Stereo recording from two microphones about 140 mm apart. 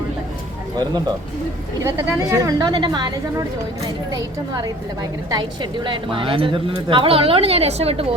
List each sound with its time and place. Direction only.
1.8 s a woman's voice: 20° right (ahead or behind); by 8.0 s 45° right (ahead or behind)